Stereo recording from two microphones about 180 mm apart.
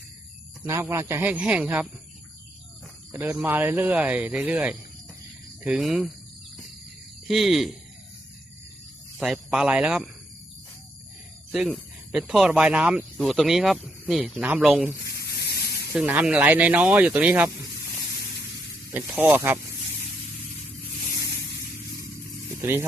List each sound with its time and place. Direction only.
0.6 s speech: 15° right (ahead or behind)
3.1 s speech: 10° right (ahead or behind)
7.3 s speech: centre (ahead or behind)
9.1 s speech: centre (ahead or behind)
11.5 s speech: centre (ahead or behind)
15.0 s a sound: 65° left (ahead or behind)
15.9 s speech: 10° right (ahead or behind)
18.9 s speech: 10° right (ahead or behind)
22.6 s speech: 15° right (ahead or behind)